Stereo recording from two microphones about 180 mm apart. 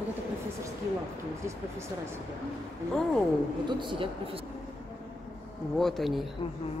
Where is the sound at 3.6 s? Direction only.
25° right (ahead or behind).